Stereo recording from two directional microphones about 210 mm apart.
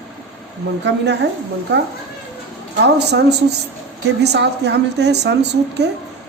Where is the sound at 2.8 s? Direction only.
55° right (ahead or behind).